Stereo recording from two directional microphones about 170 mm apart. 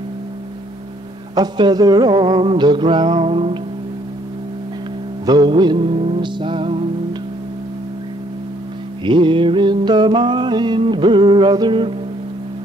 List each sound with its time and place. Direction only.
1.3 s music: 25° right (ahead or behind)
5.2 s music: 25° right (ahead or behind)
9.0 s music: 30° right (ahead or behind)